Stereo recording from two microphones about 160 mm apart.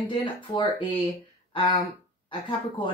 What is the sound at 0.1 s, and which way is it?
Speech, 30° left (ahead or behind).